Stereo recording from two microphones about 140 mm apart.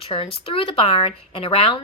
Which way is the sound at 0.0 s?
40° left (ahead or behind).